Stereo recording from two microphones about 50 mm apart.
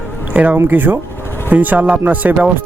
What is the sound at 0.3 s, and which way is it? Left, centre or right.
Speech, right.